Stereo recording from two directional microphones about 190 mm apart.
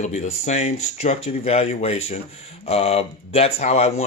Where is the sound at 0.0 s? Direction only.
35° left (ahead or behind).